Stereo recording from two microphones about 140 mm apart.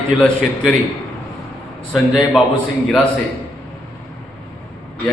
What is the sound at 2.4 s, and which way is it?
Speech, 5° left (ahead or behind).